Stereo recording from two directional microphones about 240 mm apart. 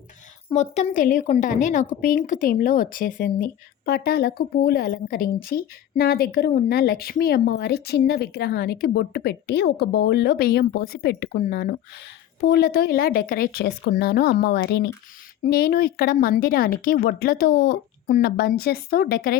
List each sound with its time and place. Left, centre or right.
0.5 s speech: left